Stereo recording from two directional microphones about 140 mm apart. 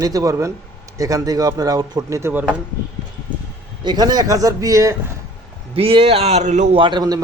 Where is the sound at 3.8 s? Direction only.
30° right (ahead or behind).